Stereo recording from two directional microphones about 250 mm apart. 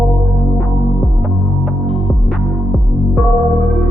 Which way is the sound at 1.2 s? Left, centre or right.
Centre.